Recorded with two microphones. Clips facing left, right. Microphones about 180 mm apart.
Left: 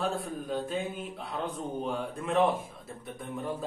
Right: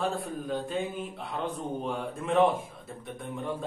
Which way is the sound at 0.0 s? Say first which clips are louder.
Right 1 dB; centre (ahead or behind).